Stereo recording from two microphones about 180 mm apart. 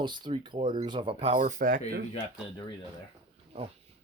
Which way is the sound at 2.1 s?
30° left (ahead or behind).